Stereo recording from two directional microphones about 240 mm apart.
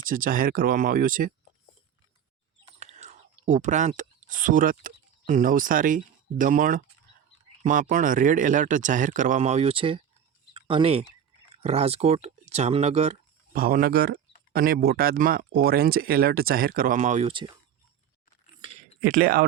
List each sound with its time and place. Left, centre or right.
0.0 s speech: right
2.7 s speech: right
19.0 s speech: right